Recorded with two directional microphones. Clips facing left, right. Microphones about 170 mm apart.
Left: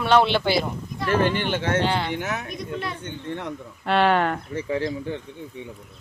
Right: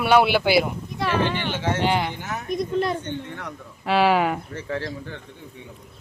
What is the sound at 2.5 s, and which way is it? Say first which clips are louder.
Speech: right 7 dB; 40° right (ahead or behind).